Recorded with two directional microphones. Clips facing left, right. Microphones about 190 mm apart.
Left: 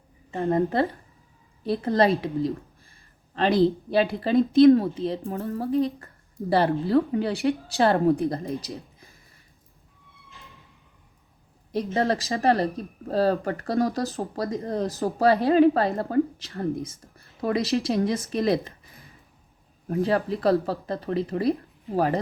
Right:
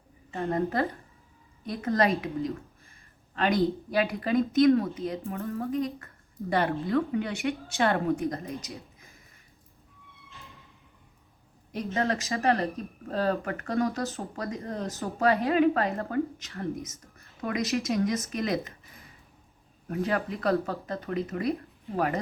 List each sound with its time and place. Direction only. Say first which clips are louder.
0.3 s speech: left 5 dB; 30° left (ahead or behind)
11.7 s speech: left 4 dB; 35° left (ahead or behind)